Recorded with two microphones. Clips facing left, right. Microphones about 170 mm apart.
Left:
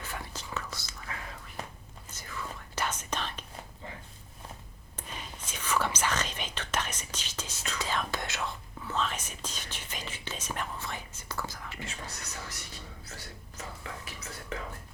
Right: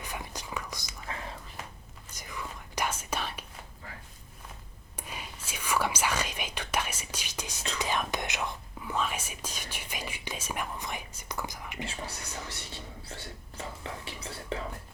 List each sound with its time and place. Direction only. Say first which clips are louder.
0.0 s whispering: right 1 dB; 15° right (ahead or behind)
2.1 s whispering: even; 15° right (ahead or behind)
4.9 s whispering: even; 10° right (ahead or behind)
11.9 s whispering: right 3 dB; 30° right (ahead or behind)